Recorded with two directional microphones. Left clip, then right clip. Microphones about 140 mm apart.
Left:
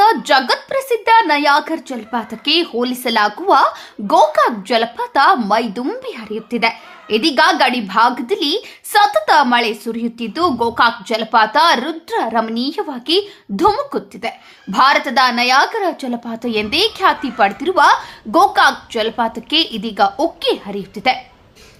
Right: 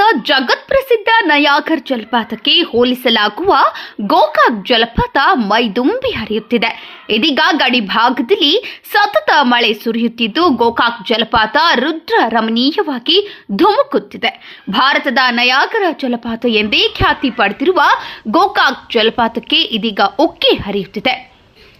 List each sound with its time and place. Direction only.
0.0 s a woman's voice: 20° right (ahead or behind)